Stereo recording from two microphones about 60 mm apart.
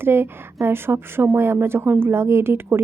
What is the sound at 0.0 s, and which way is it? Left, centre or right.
A woman's voice, right.